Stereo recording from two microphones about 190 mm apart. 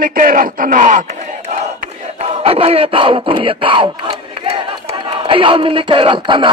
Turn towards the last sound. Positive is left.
turn(degrees=-25)  # may be behind; listen again after turning